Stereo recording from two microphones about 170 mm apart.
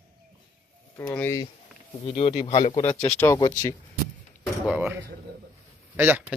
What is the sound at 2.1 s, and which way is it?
Speech, 35° left (ahead or behind).